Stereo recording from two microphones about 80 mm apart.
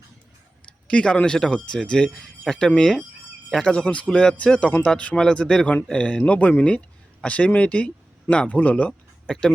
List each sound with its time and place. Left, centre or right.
0.6 s speech: centre